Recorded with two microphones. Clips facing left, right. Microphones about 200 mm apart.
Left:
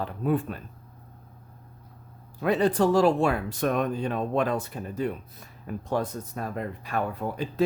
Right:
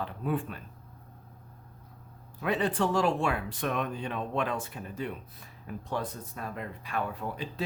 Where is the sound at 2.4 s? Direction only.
40° left (ahead or behind).